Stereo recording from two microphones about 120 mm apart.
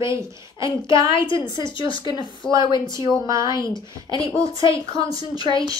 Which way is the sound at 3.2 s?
25° right (ahead or behind).